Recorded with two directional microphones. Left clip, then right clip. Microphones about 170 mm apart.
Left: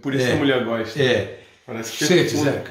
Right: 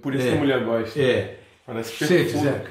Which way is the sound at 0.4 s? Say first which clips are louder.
Left 2 dB; 5° right (ahead or behind).